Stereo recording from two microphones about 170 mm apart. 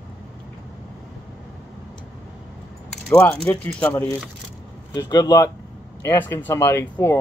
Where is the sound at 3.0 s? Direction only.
5° left (ahead or behind).